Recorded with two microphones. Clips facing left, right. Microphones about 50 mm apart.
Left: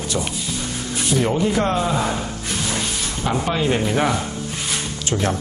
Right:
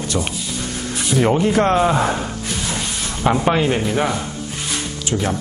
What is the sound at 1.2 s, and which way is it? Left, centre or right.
Speech, right.